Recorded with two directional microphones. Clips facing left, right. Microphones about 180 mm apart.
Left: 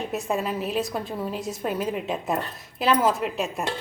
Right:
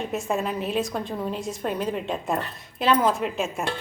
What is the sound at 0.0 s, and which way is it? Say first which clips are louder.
A woman's voice: even; centre (ahead or behind).